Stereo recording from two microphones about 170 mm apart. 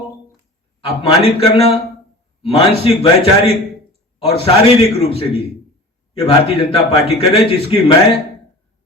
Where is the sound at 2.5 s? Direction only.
35° left (ahead or behind).